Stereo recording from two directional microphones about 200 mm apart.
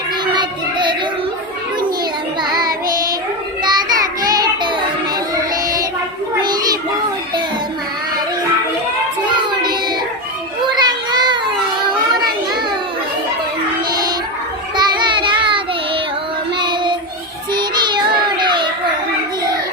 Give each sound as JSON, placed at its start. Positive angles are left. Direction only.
{"t": 0.3, "sound": "a sound", "side_deg": -25}
{"t": 2.4, "sound": "child singing", "side_deg": -20}
{"t": 6.4, "sound": "child singing", "side_deg": -20}
{"t": 10.7, "sound": "child singing", "side_deg": -20}
{"t": 14.8, "sound": "child singing", "side_deg": -25}